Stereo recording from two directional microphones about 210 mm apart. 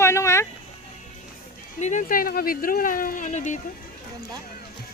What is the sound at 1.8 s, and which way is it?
Speech, 35° left (ahead or behind).